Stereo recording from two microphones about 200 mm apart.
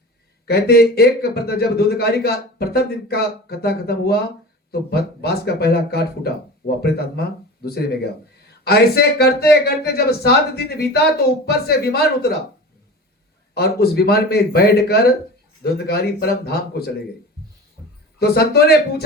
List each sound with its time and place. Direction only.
0.4 s speech: 50° left (ahead or behind)
13.5 s speech: 50° left (ahead or behind)
18.2 s speech: 55° left (ahead or behind)